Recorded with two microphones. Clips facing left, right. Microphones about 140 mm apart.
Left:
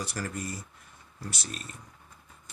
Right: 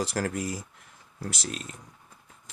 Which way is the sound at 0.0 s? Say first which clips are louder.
Right 6 dB; 90° right.